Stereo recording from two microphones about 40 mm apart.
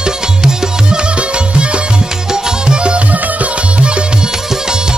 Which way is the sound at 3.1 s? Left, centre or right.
Right.